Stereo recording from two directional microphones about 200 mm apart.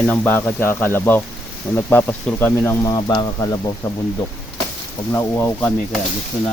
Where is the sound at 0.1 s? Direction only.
10° left (ahead or behind).